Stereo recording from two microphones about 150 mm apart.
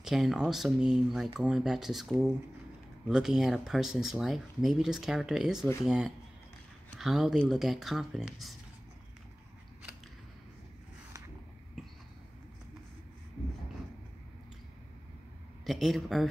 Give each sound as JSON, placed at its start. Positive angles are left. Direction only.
{"t": 0.0, "sound": "speech", "side_deg": 0}
{"t": 15.6, "sound": "speech", "side_deg": 0}